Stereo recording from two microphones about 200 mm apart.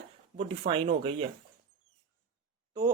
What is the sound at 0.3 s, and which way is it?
Speech, 30° right (ahead or behind).